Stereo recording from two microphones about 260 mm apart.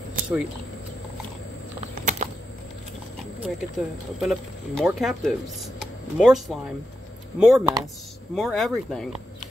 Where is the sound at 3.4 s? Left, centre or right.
Centre.